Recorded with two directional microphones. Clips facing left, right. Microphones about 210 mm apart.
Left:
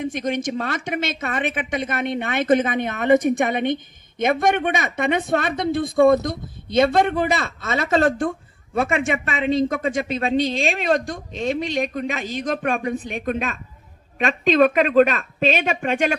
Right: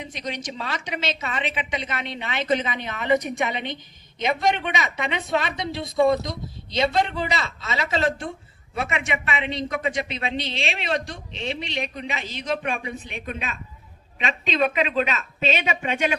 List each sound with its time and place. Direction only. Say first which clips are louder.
0.0 s a man's voice: left 9 dB; 50° left (ahead or behind)